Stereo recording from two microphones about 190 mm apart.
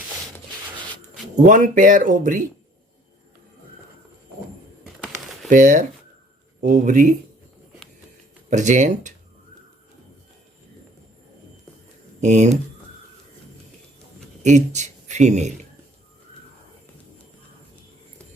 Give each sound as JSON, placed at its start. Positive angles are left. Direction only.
{"t": 1.4, "sound": "speech", "side_deg": -40}
{"t": 4.8, "sound": "bird", "side_deg": 0}
{"t": 5.5, "sound": "speech", "side_deg": -40}
{"t": 8.4, "sound": "speech", "side_deg": -40}
{"t": 12.2, "sound": "speech", "side_deg": -40}
{"t": 14.4, "sound": "speech", "side_deg": -40}